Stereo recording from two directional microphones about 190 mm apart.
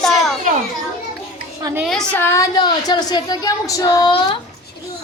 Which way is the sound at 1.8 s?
Centre (ahead or behind).